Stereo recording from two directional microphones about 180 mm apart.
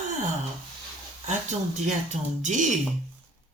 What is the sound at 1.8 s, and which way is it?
Speech, 40° right (ahead or behind).